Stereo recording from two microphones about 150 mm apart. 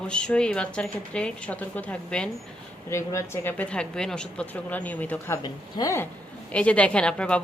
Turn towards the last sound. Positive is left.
turn(degrees=5)  # may be behind; listen again after turning